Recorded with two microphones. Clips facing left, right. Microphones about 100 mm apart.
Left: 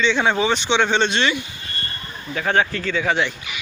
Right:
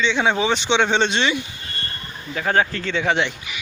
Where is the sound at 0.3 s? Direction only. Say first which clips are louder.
Even; 20° right (ahead or behind).